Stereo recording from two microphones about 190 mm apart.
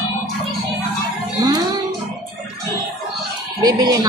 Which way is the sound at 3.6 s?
20° right (ahead or behind).